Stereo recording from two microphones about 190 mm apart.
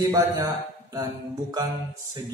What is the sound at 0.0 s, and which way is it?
Speech, 15° right (ahead or behind).